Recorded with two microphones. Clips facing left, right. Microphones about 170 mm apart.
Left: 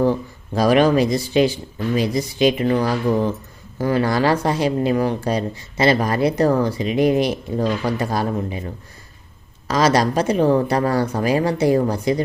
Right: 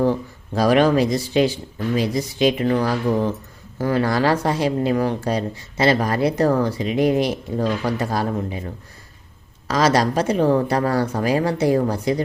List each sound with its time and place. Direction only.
0.5 s speech: 15° left (ahead or behind)
9.6 s speech: 20° left (ahead or behind)